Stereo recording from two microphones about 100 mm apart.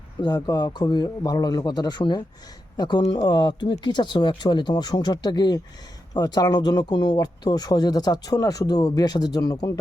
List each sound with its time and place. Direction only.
0.4 s speech: 45° left (ahead or behind)